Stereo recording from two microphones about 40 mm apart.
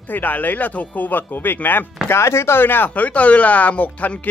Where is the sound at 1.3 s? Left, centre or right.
Left.